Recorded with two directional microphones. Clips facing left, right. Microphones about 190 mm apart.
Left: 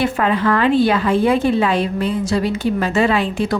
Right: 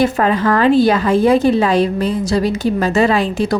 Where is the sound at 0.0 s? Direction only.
40° right (ahead or behind).